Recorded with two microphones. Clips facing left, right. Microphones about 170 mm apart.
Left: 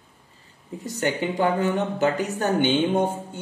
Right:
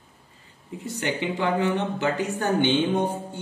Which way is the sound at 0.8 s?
40° left (ahead or behind).